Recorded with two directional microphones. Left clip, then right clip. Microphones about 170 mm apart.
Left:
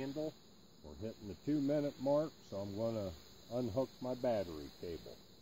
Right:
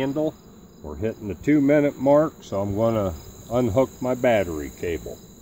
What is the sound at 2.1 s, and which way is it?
Speech, 25° left (ahead or behind).